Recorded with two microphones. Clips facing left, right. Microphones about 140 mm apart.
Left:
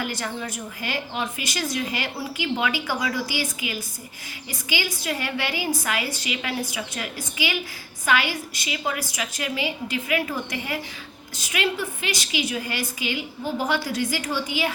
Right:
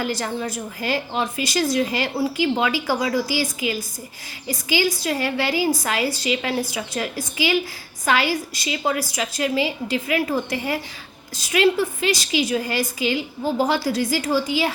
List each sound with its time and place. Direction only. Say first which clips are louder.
0.0 s a woman's voice: right 5 dB; 35° right (ahead or behind)